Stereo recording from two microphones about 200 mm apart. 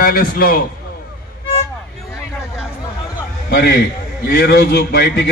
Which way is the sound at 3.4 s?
55° left (ahead or behind).